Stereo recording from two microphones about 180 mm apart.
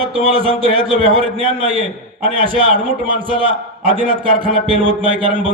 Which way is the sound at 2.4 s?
30° right (ahead or behind).